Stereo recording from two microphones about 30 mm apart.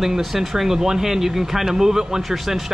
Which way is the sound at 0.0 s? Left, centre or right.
Centre.